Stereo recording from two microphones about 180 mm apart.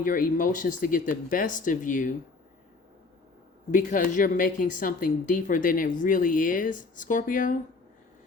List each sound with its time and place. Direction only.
0.0 s speech: 50° left (ahead or behind)
3.7 s speech: 45° left (ahead or behind)